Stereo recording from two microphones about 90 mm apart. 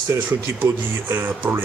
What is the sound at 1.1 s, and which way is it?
Speech, 25° right (ahead or behind).